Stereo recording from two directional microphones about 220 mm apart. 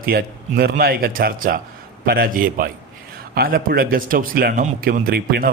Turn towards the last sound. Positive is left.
turn(degrees=-45)  # may be behind; listen again after turning